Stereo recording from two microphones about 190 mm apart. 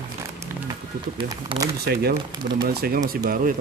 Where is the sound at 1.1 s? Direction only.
25° right (ahead or behind).